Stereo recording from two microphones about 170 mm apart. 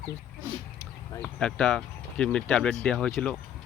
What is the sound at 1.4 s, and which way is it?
Speech, 5° left (ahead or behind).